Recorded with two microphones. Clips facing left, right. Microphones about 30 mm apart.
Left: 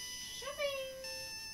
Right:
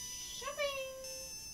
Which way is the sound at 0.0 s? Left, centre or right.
Left.